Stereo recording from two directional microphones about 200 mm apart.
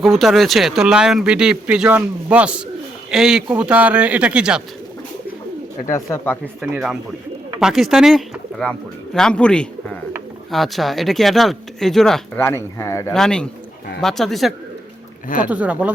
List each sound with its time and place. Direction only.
0.0 s speech: centre (ahead or behind)
6.1 s speech: 10° left (ahead or behind)
6.6 s speech: centre (ahead or behind)
12.4 s speech: 15° left (ahead or behind)
13.1 s speech: 5° left (ahead or behind)